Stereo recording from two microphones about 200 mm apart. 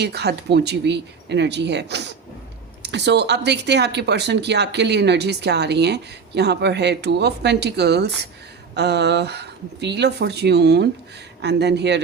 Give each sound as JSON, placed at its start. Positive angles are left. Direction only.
{"t": 0.0, "sound": "speech", "side_deg": -55}